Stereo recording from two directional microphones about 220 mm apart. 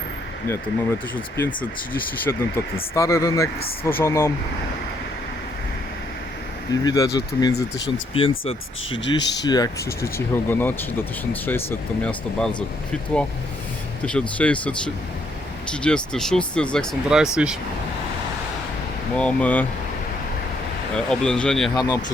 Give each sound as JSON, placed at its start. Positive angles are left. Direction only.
{"t": 0.4, "sound": "speech", "side_deg": 10}
{"t": 6.7, "sound": "speech", "side_deg": 15}
{"t": 19.1, "sound": "speech", "side_deg": 5}
{"t": 20.9, "sound": "speech", "side_deg": 5}
{"t": 21.8, "sound": "speech", "side_deg": 15}